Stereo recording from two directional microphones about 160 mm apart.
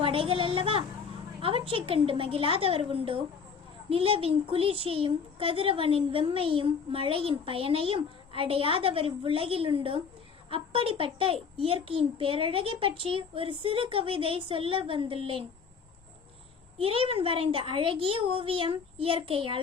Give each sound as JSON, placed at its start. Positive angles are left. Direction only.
{"t": 0.0, "sound": "a woman's voice", "side_deg": -35}
{"t": 16.7, "sound": "a child's voice", "side_deg": -35}